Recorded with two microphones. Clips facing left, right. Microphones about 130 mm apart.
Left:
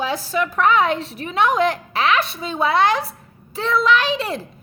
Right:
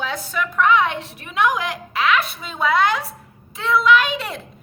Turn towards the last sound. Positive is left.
turn(degrees=30)  # may be behind; listen again after turning